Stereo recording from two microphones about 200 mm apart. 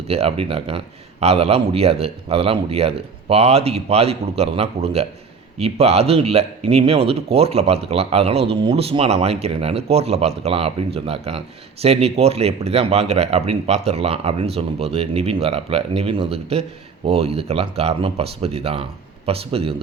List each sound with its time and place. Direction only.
0.1 s speech: 30° right (ahead or behind)